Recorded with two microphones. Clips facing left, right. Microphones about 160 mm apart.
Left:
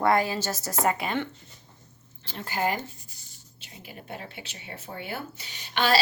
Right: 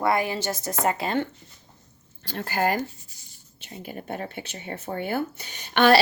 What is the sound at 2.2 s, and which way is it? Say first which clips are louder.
Speech: right 3 dB; 45° right (ahead or behind).